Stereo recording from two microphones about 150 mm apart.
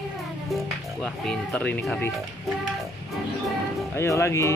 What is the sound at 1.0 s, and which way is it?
Speech, 5° left (ahead or behind).